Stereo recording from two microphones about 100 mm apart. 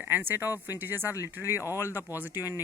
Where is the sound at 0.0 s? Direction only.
20° right (ahead or behind).